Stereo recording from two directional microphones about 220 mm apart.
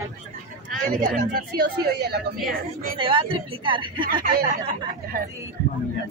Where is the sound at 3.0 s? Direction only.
20° right (ahead or behind).